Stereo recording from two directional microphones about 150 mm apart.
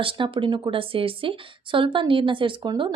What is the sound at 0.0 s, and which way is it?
Speech, 35° right (ahead or behind).